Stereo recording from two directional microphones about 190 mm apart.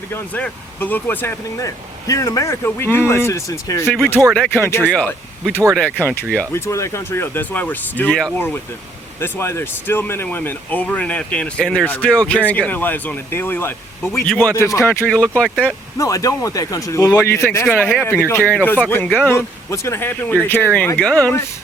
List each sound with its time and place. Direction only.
0.1 s speech: 10° left (ahead or behind)
3.8 s speech: centre (ahead or behind)
4.7 s speech: 10° left (ahead or behind)
16.0 s speech: 15° left (ahead or behind)